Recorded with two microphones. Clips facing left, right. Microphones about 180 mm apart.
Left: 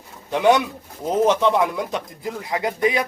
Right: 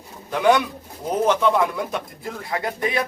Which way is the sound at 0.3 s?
20° left (ahead or behind).